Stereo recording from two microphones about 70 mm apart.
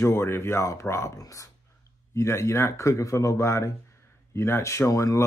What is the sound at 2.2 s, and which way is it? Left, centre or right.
Speech, left.